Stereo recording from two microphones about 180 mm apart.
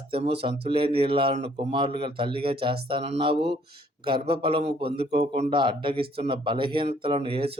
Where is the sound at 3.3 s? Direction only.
70° right (ahead or behind).